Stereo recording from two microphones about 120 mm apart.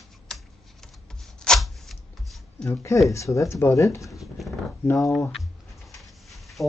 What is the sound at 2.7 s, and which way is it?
Speech, 25° left (ahead or behind).